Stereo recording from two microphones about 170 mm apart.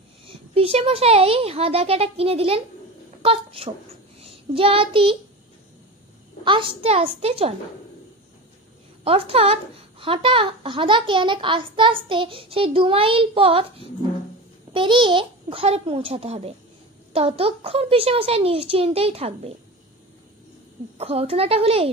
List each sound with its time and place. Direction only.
0.3 s speech: 35° right (ahead or behind)
4.2 s child singing: 35° right (ahead or behind)
6.4 s speech: 30° right (ahead or behind)
9.0 s speech: 35° right (ahead or behind)
21.0 s speech: 35° right (ahead or behind)